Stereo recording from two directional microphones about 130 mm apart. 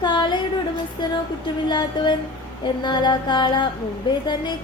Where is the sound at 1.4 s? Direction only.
35° left (ahead or behind).